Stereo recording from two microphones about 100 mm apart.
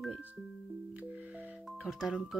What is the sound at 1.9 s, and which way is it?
Speech, 5° right (ahead or behind).